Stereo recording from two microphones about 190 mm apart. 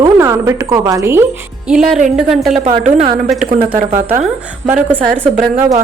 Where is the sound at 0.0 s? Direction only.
15° right (ahead or behind).